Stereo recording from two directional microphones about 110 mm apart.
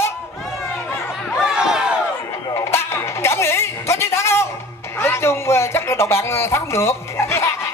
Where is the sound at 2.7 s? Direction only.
25° left (ahead or behind).